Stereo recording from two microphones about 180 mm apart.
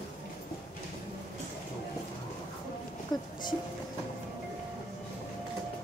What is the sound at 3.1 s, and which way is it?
Speech, 25° left (ahead or behind).